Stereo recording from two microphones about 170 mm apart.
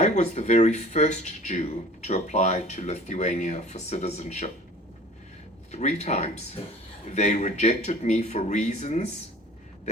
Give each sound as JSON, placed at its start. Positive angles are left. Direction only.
{"t": 0.0, "sound": "speech", "side_deg": 40}
{"t": 5.7, "sound": "speech", "side_deg": 40}